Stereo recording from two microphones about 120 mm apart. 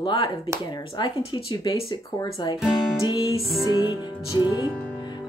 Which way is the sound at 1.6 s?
30° left (ahead or behind).